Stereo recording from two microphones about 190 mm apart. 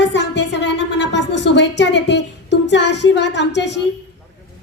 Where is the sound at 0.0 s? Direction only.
70° left (ahead or behind).